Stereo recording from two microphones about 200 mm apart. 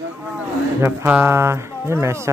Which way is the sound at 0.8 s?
10° right (ahead or behind).